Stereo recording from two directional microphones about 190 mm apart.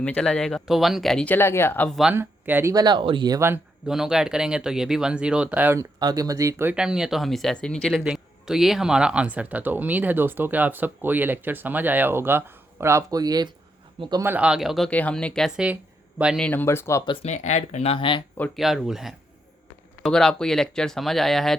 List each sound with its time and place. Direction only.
0.0 s speech: 5° left (ahead or behind)
2.0 s speech: 5° right (ahead or behind)
3.8 s speech: 5° right (ahead or behind); by 14.3 s 20° right (ahead or behind)
14.3 s speech: 5° right (ahead or behind)
16.5 s speech: 10° left (ahead or behind)
17.2 s speech: 40° left (ahead or behind)
18.3 s speech: 5° left (ahead or behind)